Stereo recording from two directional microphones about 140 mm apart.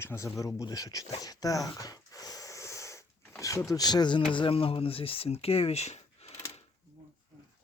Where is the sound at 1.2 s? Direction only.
25° left (ahead or behind).